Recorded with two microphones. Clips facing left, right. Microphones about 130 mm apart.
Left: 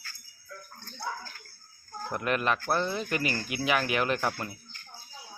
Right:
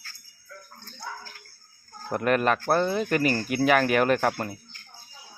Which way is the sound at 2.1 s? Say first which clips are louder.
Right 6 dB; 45° right (ahead or behind).